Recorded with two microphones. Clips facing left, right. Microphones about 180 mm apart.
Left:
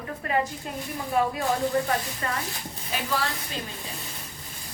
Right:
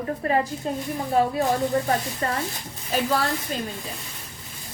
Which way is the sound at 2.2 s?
35° right (ahead or behind).